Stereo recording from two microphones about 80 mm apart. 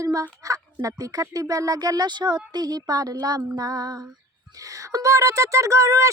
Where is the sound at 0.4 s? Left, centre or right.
Right.